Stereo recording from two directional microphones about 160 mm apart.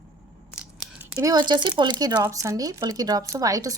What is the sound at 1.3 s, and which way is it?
Speech, 25° right (ahead or behind).